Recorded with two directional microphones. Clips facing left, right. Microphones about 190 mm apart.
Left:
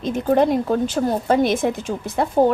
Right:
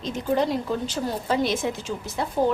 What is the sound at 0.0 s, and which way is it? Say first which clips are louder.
Speech: left 6 dB; 55° left (ahead or behind).